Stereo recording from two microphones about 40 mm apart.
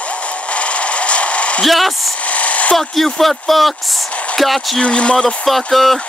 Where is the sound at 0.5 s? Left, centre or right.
Left.